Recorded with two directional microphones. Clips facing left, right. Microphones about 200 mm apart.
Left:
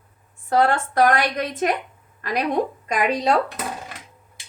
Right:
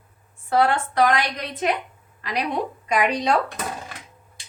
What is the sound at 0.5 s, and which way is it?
A woman's voice, 45° left (ahead or behind).